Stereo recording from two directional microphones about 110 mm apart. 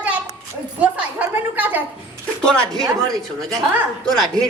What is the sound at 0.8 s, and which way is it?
A woman's voice, 15° right (ahead or behind).